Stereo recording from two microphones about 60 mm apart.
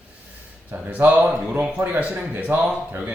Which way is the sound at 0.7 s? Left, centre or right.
Right.